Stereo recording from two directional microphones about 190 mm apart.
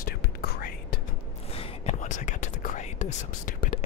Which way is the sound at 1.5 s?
35° left (ahead or behind).